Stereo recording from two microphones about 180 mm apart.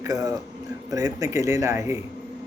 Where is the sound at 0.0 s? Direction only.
20° right (ahead or behind).